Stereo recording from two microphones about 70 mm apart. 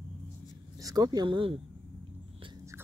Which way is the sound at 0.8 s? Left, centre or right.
Right.